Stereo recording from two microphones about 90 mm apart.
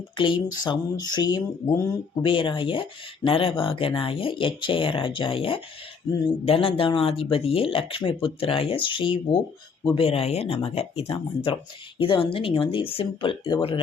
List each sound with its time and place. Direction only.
0.2 s speech: 65° left (ahead or behind)
2.2 s speech: 70° left (ahead or behind)
3.2 s speech: 90° left; by 9.4 s 70° left (ahead or behind)
9.9 s speech: 90° left
11.9 s speech: 75° left (ahead or behind)